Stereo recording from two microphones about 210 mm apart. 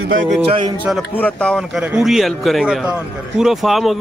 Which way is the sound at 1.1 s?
5° left (ahead or behind).